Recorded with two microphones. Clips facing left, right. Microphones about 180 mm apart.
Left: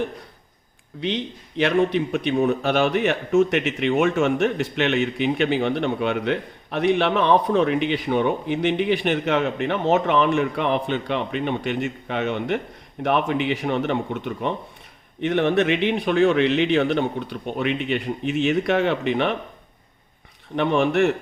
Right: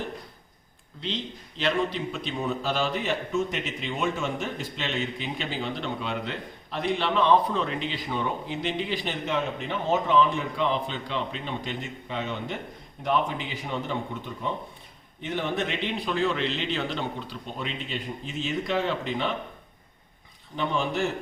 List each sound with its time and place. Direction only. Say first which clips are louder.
1.0 s a man's voice: left 7 dB; 65° left (ahead or behind)
20.6 s a man's voice: left 8 dB; 65° left (ahead or behind)